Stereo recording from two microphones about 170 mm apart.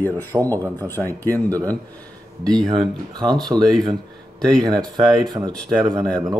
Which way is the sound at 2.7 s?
25° right (ahead or behind).